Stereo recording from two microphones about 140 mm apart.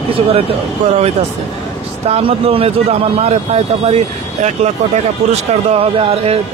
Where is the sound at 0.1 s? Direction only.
45° right (ahead or behind).